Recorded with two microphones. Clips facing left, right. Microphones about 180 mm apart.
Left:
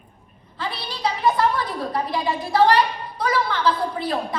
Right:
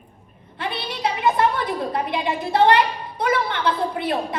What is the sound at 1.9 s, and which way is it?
A woman's voice, 20° right (ahead or behind).